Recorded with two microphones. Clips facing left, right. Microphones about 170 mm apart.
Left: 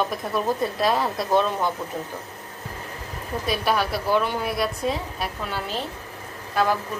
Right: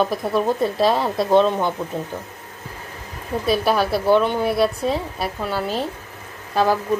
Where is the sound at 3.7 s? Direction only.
30° right (ahead or behind).